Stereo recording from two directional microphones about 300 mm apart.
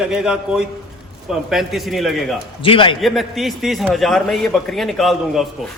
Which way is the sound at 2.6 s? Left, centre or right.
Centre.